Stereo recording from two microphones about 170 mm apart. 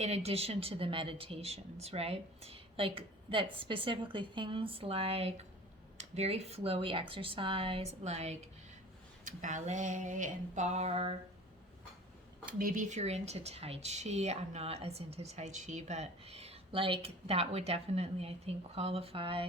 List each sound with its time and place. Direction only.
0.0 s speech: 40° right (ahead or behind)
9.2 s a sound: 50° right (ahead or behind)
12.5 s speech: 55° right (ahead or behind); by 19.5 s 30° right (ahead or behind)